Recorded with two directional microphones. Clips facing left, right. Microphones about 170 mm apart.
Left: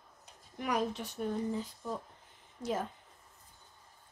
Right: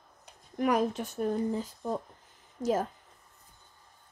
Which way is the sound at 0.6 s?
50° right (ahead or behind).